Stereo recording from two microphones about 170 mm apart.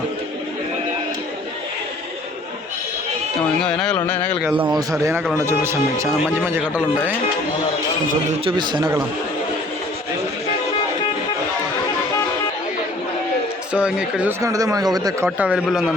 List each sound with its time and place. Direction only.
3.6 s a sound: 5° left (ahead or behind)
4.7 s a man's voice: 20° right (ahead or behind)
8.4 s a man's voice: 25° right (ahead or behind)
13.7 s a man's voice: 5° right (ahead or behind)
14.4 s a man's voice: 20° right (ahead or behind)
15.4 s a man's voice: 10° right (ahead or behind)